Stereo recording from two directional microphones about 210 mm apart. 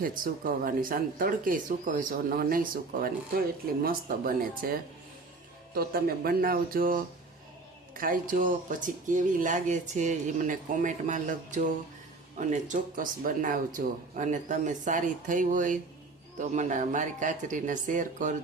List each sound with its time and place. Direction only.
0.0 s speech: 45° right (ahead or behind)